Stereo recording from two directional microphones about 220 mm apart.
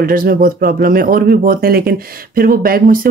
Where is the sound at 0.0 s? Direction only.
40° right (ahead or behind).